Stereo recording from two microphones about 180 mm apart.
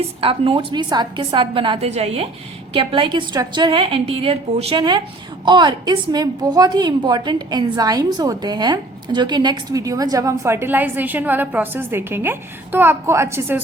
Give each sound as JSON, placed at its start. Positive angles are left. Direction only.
{"t": 0.2, "sound": "a woman's voice", "side_deg": -30}